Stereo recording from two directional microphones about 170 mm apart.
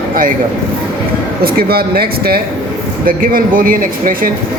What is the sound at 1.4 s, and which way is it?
Speech, 65° right (ahead or behind).